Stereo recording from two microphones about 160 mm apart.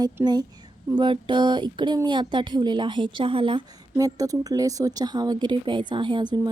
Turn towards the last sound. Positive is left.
turn(degrees=-30)  # may be behind; listen again after turning